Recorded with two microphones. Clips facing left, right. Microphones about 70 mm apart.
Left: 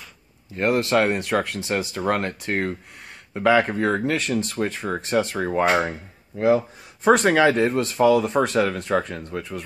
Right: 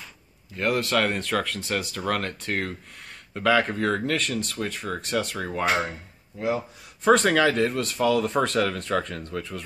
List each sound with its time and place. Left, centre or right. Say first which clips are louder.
0.6 s speech: left 4 dB; left
5.9 s speech: left 5 dB; left
7.1 s speech: left 3 dB; centre